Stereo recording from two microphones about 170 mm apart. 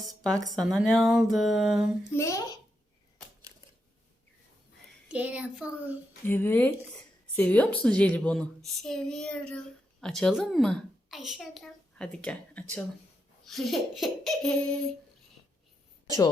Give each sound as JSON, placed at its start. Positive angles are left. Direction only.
{"t": 0.0, "sound": "a sound", "side_deg": 0}
{"t": 0.5, "sound": "a child's voice", "side_deg": 0}
{"t": 2.1, "sound": "a woman's voice", "side_deg": 20}
{"t": 5.0, "sound": "a child's voice", "side_deg": -10}
{"t": 6.2, "sound": "a woman's voice", "side_deg": 10}